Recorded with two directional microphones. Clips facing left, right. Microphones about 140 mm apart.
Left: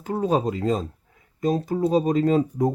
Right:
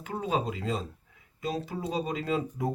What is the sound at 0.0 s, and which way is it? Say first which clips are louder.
Speech: left 8 dB; 40° left (ahead or behind).